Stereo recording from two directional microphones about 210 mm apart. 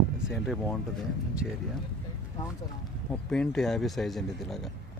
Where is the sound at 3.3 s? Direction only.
5° left (ahead or behind).